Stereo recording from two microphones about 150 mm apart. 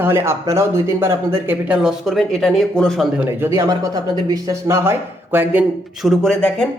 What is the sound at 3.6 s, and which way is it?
Speech, 25° right (ahead or behind).